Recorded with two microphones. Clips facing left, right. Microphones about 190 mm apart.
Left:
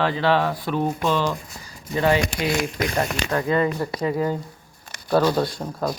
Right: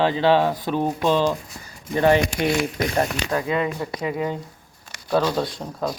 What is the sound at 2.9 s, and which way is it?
Speech, 25° right (ahead or behind).